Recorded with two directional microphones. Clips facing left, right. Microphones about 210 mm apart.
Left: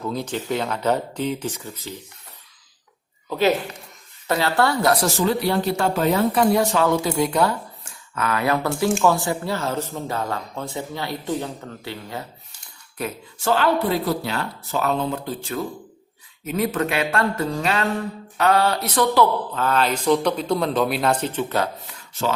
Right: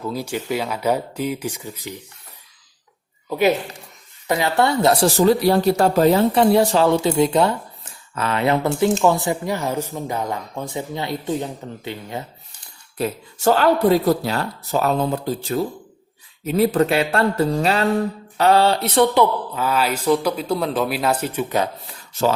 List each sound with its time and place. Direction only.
0.0 s speech: 5° right (ahead or behind)
3.2 s a woman's voice: 15° right (ahead or behind)
13.0 s speech: 40° right (ahead or behind); by 21.7 s 15° right (ahead or behind)